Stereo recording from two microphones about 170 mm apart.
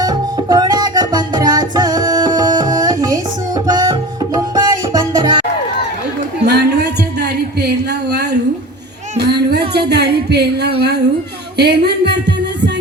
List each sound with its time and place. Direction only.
0.0 s music: 25° right (ahead or behind)
4.4 s tabla: 25° right (ahead or behind)
6.4 s a sound: 75° right (ahead or behind)
9.1 s music: 75° right (ahead or behind)
10.2 s speech: 75° right (ahead or behind)